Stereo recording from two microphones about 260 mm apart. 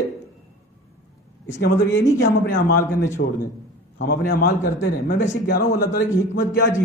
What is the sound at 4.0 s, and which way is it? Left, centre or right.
A man's voice, left.